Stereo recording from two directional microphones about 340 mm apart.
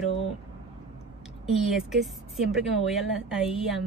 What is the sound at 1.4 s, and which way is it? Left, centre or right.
Speech, centre.